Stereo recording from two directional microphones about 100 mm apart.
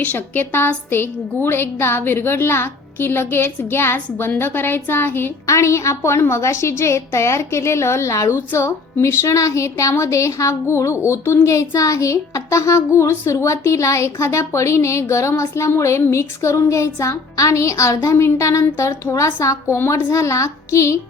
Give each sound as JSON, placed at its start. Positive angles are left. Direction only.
{"t": 0.0, "sound": "a woman's voice", "side_deg": 15}